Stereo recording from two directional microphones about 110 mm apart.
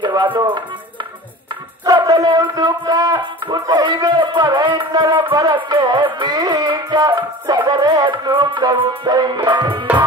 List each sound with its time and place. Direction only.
0.1 s music: 40° right (ahead or behind)
2.0 s a sound: 35° right (ahead or behind)
5.3 s music: 35° right (ahead or behind)